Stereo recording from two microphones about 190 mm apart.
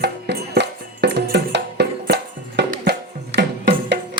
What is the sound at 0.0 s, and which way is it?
Music, 60° right (ahead or behind).